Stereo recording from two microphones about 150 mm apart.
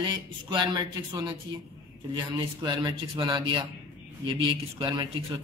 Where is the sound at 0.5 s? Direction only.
30° right (ahead or behind).